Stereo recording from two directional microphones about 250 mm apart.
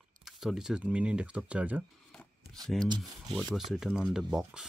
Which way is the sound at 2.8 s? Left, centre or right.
Centre.